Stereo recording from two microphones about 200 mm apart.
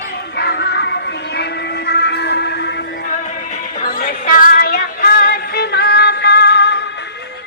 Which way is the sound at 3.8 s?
45° left (ahead or behind).